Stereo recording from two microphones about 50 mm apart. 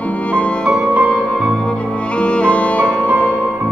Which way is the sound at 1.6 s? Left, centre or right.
Left.